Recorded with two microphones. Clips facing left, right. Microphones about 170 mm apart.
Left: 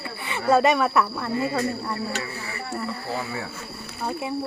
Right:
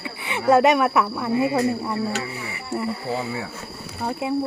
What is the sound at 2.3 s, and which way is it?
Snake, 20° right (ahead or behind).